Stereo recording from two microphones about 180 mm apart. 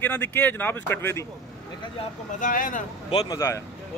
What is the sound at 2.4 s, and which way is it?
Speech, 50° left (ahead or behind).